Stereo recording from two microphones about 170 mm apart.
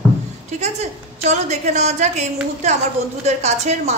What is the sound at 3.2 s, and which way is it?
Speech, 40° right (ahead or behind).